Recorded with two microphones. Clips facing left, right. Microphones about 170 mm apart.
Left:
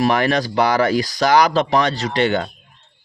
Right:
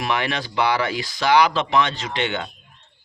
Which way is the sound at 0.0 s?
40° left (ahead or behind).